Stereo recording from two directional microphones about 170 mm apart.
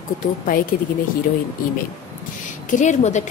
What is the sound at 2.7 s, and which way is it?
Speech, 45° left (ahead or behind).